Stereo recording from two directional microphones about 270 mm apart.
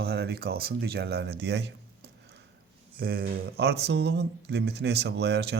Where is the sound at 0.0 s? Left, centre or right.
Right.